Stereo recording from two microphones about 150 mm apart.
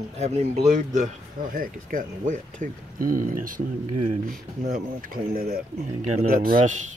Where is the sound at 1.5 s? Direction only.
65° right (ahead or behind).